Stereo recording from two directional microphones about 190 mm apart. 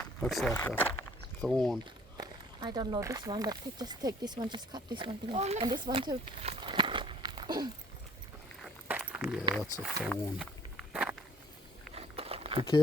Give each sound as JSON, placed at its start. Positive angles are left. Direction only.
{"t": 0.2, "sound": "speech", "side_deg": 0}
{"t": 1.8, "sound": "speech", "side_deg": -25}
{"t": 5.6, "sound": "walk", "side_deg": -25}
{"t": 8.6, "sound": "walk", "side_deg": -5}
{"t": 9.8, "sound": "speech", "side_deg": 0}
{"t": 11.9, "sound": "a sound", "side_deg": -30}